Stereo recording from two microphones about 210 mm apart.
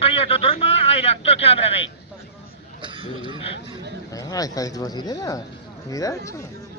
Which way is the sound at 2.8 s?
25° right (ahead or behind).